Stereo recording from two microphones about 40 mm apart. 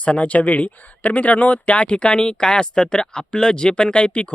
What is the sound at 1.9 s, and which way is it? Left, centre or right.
Speech, left.